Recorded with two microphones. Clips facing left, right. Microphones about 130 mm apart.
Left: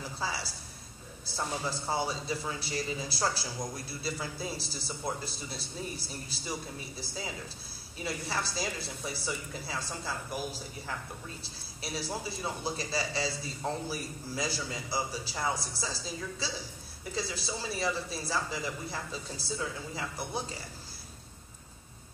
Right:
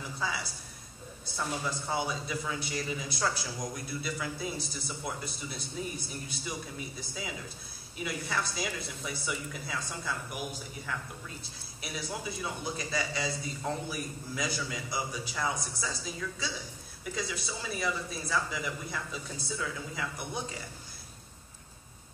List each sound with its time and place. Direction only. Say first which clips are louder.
0.2 s a sound: right 1 dB; 30° left (ahead or behind)
1.3 s a man's voice: even; 30° left (ahead or behind)
8.0 s a man's voice: right 1 dB; 30° left (ahead or behind)